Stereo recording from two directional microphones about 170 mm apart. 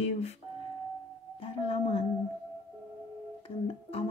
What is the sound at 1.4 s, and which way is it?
Music, 35° left (ahead or behind).